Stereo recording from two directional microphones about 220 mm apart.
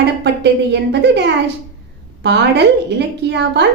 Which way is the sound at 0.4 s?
50° right (ahead or behind).